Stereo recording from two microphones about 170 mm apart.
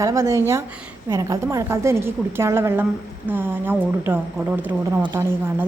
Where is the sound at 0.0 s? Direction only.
15° right (ahead or behind).